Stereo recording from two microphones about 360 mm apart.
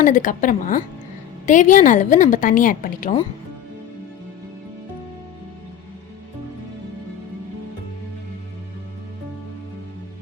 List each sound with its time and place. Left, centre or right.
0.0 s a woman's voice: left